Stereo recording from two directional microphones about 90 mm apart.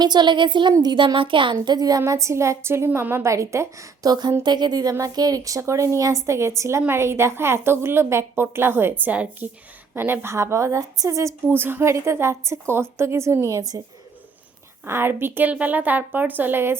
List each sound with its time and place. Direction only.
0.0 s speech: 55° right (ahead or behind)
1.6 s speech: 50° right (ahead or behind)
2.0 s speech: 35° right (ahead or behind)
11.4 s a woman's voice: 25° right (ahead or behind); by 13.8 s 40° right (ahead or behind)
14.8 s a woman's voice: 25° right (ahead or behind)